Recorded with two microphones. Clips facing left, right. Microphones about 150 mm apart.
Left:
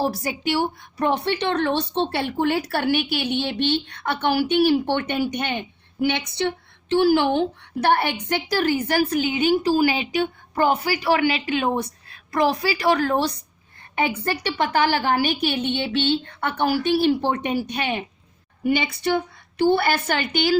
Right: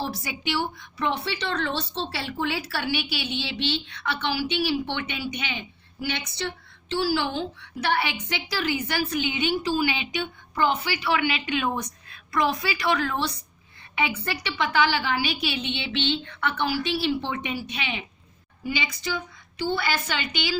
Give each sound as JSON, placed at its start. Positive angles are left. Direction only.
{"t": 0.0, "sound": "a woman's voice", "side_deg": 45}
{"t": 18.6, "sound": "a woman's voice", "side_deg": 60}